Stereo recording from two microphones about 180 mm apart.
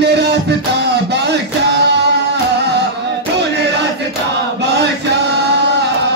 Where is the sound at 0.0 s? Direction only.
70° right (ahead or behind).